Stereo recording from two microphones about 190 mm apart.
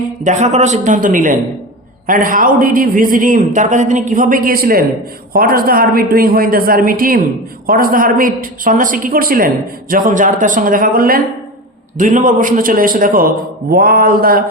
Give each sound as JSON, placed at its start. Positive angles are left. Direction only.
{"t": 0.3, "sound": "a man's voice", "side_deg": -40}